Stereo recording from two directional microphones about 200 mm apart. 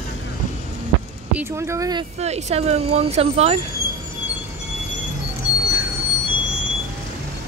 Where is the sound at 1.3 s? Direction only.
15° right (ahead or behind).